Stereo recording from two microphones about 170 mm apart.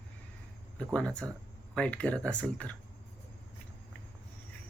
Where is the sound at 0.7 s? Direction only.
5° left (ahead or behind).